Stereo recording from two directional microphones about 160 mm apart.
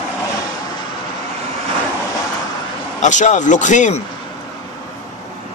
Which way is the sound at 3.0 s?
50° left (ahead or behind).